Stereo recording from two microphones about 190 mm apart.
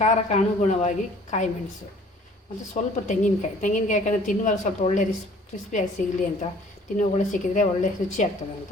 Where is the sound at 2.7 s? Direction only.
40° left (ahead or behind).